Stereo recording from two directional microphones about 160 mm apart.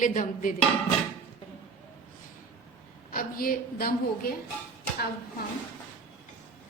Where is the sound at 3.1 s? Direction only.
65° left (ahead or behind).